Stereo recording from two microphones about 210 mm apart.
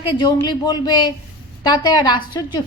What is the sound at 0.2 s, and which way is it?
Speech, 20° left (ahead or behind).